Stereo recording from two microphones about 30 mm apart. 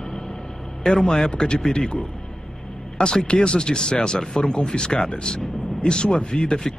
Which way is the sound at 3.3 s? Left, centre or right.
Left.